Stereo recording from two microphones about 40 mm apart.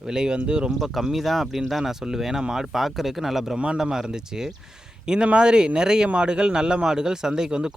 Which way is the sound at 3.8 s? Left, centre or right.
Centre.